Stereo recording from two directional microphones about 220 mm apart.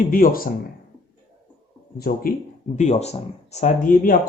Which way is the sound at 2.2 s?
40° left (ahead or behind).